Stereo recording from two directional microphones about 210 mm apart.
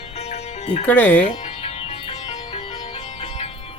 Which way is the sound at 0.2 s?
30° left (ahead or behind).